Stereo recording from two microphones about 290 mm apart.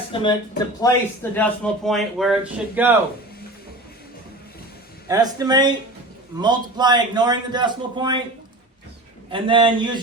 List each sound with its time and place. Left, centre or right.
0.1 s a man's voice: centre
5.0 s a man's voice: centre
9.3 s a man's voice: centre